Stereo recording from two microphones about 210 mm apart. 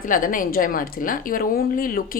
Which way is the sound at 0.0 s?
40° left (ahead or behind).